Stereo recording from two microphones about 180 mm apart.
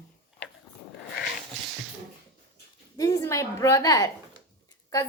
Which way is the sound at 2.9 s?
20° left (ahead or behind).